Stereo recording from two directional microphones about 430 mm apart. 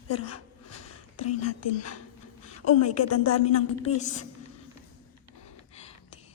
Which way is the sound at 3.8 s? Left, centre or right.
Centre.